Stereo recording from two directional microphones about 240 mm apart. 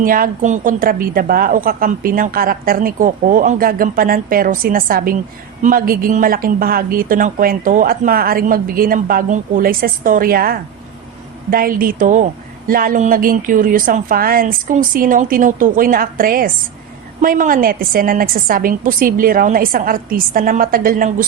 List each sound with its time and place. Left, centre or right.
0.0 s a woman's voice: right